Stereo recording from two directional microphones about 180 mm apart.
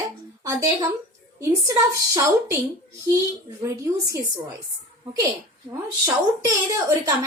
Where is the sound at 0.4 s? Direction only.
20° right (ahead or behind).